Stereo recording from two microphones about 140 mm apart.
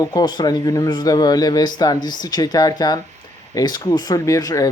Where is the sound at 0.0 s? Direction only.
30° left (ahead or behind).